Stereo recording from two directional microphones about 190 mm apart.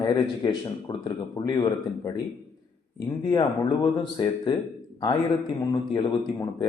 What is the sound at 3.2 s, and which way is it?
Speech, 20° left (ahead or behind).